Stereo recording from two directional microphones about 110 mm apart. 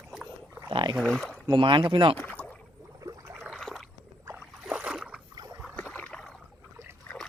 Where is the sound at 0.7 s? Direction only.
45° right (ahead or behind).